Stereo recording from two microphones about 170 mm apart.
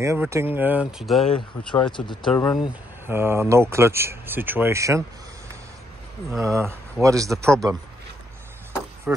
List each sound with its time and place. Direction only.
0.0 s speech: 15° right (ahead or behind); by 1.9 s 5° left (ahead or behind)
1.9 s speech: 30° left (ahead or behind)
2.3 s speech: 10° left (ahead or behind)
3.1 s speech: 15° right (ahead or behind)
6.4 s speech: 15° right (ahead or behind)
9.1 s speech: 10° right (ahead or behind)